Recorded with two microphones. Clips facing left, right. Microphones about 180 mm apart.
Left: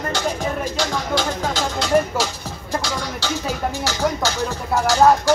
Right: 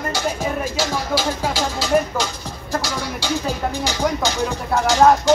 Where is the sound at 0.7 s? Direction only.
5° right (ahead or behind).